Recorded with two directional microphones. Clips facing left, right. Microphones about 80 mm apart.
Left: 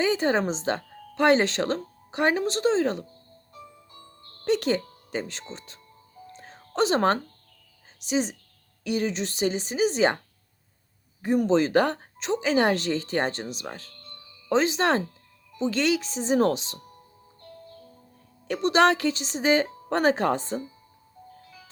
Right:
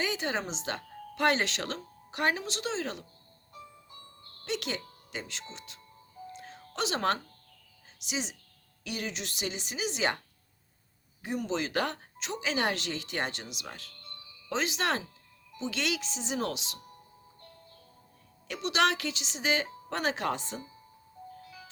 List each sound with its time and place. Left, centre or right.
0.0 s speech: left
4.4 s speech: left
6.3 s music: left
8.0 s speech: left
11.2 s speech: left
18.4 s speech: left